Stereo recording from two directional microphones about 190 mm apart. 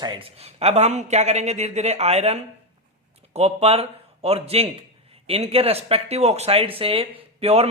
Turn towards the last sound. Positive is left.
turn(degrees=-35)  # may be behind; listen again after turning